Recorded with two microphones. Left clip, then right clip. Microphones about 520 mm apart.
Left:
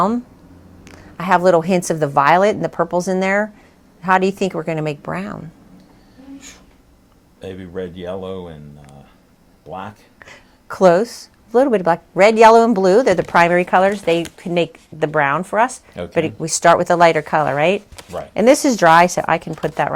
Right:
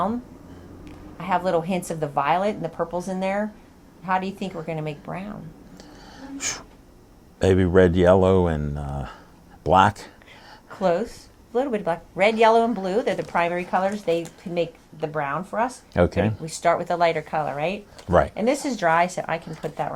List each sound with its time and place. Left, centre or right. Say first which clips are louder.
0.9 s a woman's voice: left 9 dB; left
6.5 s speech: right 11 dB; right
9.6 s speech: right 14 dB; right
10.2 s a woman's voice: left 4 dB; left